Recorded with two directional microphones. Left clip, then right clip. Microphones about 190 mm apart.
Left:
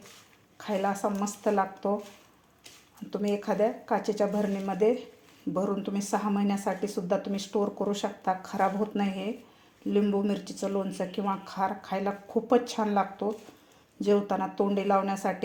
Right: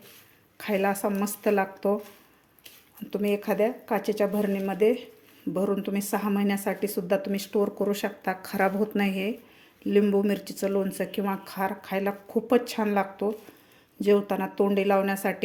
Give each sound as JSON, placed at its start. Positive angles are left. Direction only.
{"t": 0.6, "sound": "speech", "side_deg": -20}
{"t": 3.1, "sound": "speech", "side_deg": -20}